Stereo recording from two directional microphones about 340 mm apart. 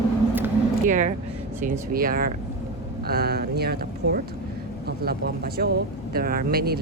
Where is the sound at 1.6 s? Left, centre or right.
Right.